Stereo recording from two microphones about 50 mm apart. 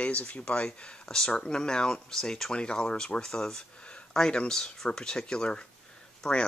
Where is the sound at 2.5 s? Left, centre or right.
Centre.